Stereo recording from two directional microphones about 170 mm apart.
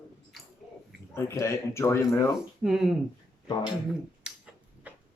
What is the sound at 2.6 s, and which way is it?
Speech, centre (ahead or behind).